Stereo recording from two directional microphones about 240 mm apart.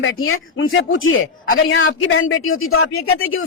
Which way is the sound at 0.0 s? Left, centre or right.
Left.